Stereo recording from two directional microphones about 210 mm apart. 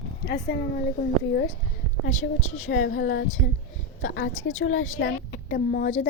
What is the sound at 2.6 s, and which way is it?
Speech, 60° left (ahead or behind).